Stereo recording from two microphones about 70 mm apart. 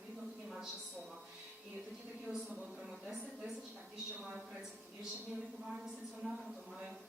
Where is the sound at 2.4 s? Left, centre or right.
Centre.